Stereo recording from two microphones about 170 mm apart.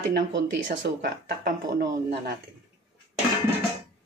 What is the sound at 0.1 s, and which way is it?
Speech, 90° right.